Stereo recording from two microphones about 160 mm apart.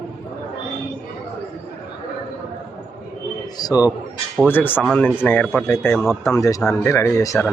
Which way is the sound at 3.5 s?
25° left (ahead or behind).